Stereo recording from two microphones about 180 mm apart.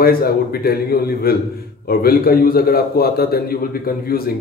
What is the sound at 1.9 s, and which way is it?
Speech, 55° left (ahead or behind).